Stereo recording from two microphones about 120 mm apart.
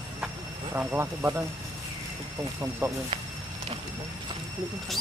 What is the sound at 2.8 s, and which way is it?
Speech, 25° right (ahead or behind).